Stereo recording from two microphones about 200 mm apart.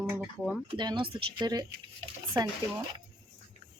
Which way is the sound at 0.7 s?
25° right (ahead or behind).